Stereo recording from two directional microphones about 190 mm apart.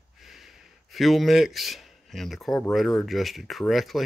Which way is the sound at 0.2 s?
Centre (ahead or behind).